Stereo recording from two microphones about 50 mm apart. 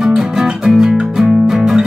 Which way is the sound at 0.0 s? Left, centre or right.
Centre.